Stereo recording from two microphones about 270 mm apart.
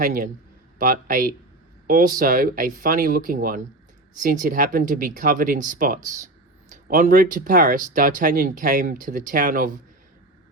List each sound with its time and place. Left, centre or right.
0.0 s speech: right